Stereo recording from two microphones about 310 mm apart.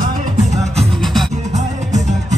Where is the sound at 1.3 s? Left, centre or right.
Right.